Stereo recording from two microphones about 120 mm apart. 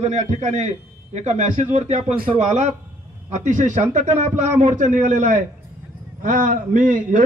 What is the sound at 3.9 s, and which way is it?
A man's voice, 90° right.